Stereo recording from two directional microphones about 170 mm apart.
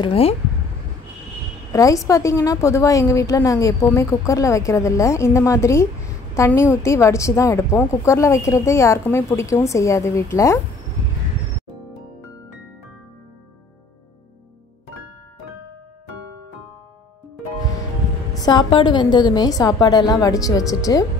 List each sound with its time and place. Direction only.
0.0 s speech: 35° left (ahead or behind)
1.7 s a woman's voice: 20° left (ahead or behind)
18.4 s a woman's voice: 25° left (ahead or behind)